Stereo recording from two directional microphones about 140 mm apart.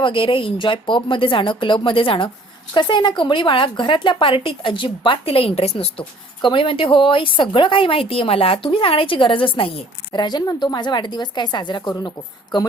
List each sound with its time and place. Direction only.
0.0 s a woman's voice: 35° left (ahead or behind)